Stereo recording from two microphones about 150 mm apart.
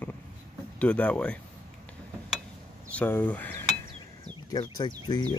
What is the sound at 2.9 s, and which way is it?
Speech, 10° left (ahead or behind).